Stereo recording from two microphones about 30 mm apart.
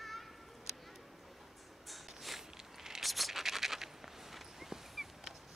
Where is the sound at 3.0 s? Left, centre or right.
Centre.